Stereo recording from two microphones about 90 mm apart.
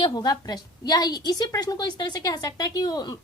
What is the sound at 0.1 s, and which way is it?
A woman's voice, 50° left (ahead or behind).